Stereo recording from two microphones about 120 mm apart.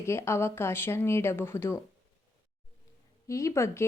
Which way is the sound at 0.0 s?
20° left (ahead or behind).